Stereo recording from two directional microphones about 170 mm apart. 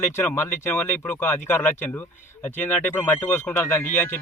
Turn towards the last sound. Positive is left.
turn(degrees=15)  # may be behind; listen again after turning